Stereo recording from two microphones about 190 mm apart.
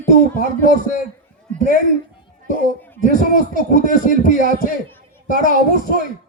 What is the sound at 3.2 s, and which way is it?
Speech, 40° left (ahead or behind).